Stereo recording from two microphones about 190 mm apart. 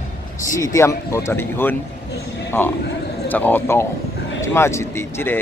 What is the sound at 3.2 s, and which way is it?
Speech, 10° left (ahead or behind).